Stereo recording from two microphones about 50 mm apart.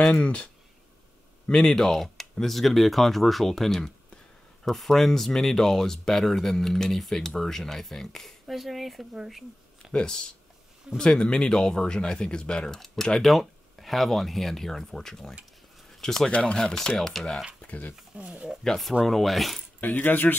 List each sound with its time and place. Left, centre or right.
0.1 s speech: left
1.5 s speech: centre
9.9 s speech: centre
15.9 s a sound: centre
16.3 s speech: left
16.7 s speech: centre
17.6 s a sound: left
18.1 s speech: right
19.0 s speech: centre
19.8 s speech: left